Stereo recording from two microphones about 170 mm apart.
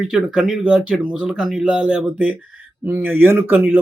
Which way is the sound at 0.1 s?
5° right (ahead or behind).